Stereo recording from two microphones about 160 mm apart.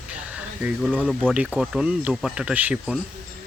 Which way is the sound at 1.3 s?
5° right (ahead or behind).